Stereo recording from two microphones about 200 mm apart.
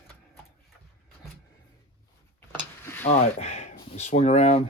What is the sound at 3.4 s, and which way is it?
Speech, 35° left (ahead or behind).